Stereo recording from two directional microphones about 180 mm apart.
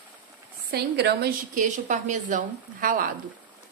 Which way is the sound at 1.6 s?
45° right (ahead or behind).